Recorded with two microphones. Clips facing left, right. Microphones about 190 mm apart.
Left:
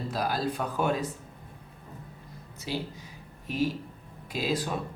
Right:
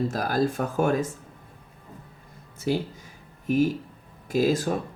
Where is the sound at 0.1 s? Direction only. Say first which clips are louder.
Right 5 dB; 45° right (ahead or behind).